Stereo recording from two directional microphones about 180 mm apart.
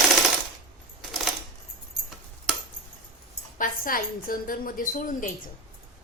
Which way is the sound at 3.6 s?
50° left (ahead or behind).